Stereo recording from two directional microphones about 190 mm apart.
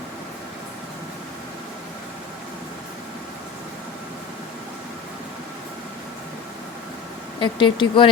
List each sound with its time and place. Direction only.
7.3 s speech: 25° left (ahead or behind)